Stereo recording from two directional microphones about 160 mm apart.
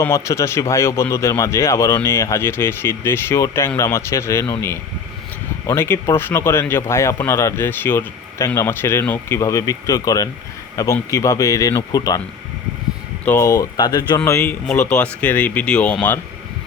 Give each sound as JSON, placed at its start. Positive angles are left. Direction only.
{"t": 0.0, "sound": "speech", "side_deg": 15}
{"t": 5.6, "sound": "speech", "side_deg": 15}
{"t": 13.2, "sound": "speech", "side_deg": 15}